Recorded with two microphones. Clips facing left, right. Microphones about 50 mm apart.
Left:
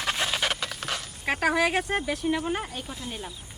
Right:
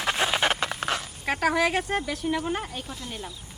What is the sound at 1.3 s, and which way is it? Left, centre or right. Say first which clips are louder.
Speech: even; centre.